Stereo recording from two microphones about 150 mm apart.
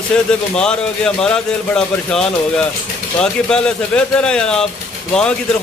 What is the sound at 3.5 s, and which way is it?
A man's voice, 5° left (ahead or behind).